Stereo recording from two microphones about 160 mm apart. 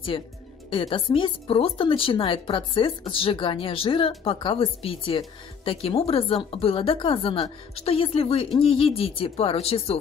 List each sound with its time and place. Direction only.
0.1 s speech: 35° left (ahead or behind)